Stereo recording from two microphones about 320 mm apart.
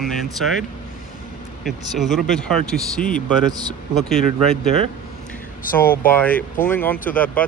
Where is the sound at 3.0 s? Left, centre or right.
Left.